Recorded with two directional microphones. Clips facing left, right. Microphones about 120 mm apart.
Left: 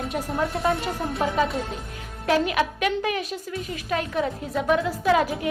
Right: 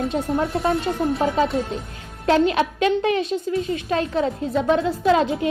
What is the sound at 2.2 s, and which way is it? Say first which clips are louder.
A woman's voice: right 4 dB; 30° right (ahead or behind).